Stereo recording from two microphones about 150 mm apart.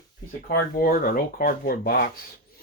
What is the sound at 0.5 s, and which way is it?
Speech, 70° left (ahead or behind).